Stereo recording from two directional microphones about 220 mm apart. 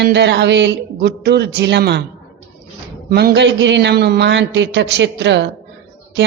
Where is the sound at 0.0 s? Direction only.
50° right (ahead or behind).